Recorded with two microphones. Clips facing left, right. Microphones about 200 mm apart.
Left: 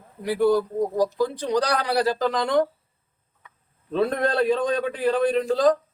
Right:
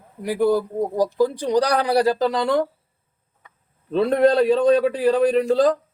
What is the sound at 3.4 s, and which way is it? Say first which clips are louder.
A man's voice: right 2 dB; 35° right (ahead or behind).